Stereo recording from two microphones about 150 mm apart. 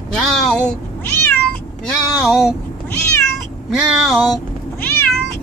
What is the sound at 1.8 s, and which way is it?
Speech, centre (ahead or behind).